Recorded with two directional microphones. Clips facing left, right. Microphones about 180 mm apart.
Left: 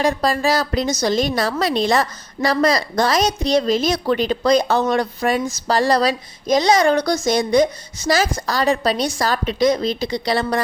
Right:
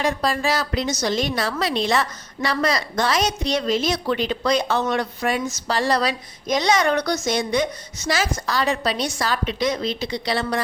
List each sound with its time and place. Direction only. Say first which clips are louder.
0.0 s a woman's voice: left 4 dB; 40° left (ahead or behind)